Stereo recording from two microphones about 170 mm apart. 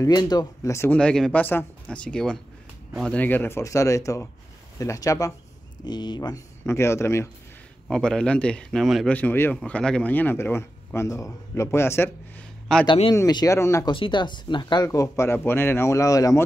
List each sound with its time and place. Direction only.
0.0 s a man's voice: 25° left (ahead or behind)
7.9 s a man's voice: 5° left (ahead or behind)
9.1 s a man's voice: 10° left (ahead or behind)
12.8 s speech: 35° left (ahead or behind)
13.1 s a man's voice: 20° left (ahead or behind)
13.9 s speech: 30° left (ahead or behind)